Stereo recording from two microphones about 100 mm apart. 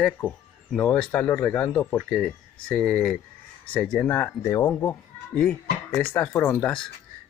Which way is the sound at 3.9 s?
15° left (ahead or behind).